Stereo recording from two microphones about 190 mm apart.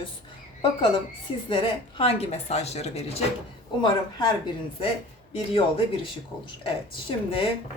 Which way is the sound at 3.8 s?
25° left (ahead or behind).